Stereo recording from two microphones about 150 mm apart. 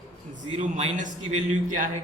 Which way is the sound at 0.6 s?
55° right (ahead or behind).